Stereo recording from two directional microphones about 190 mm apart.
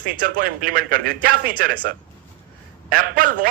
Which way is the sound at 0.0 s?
45° right (ahead or behind).